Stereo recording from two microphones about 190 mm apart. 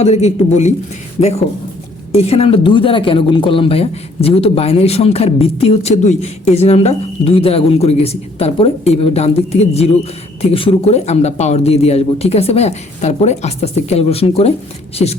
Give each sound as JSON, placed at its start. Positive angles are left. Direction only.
{"t": 0.0, "sound": "speech", "side_deg": 35}